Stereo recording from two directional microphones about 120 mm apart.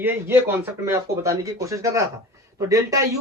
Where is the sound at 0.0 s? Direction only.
20° right (ahead or behind).